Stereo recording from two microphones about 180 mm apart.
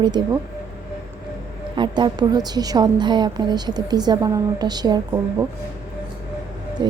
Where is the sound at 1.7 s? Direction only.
25° right (ahead or behind).